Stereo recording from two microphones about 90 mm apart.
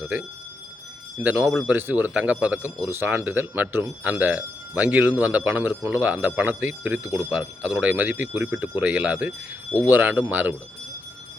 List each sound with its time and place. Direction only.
0.0 s speech: 15° right (ahead or behind)